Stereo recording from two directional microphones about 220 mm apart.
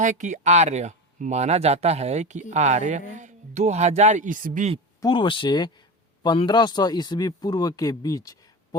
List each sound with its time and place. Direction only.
0.0 s speech: 35° right (ahead or behind)
4.9 s speech: 20° left (ahead or behind)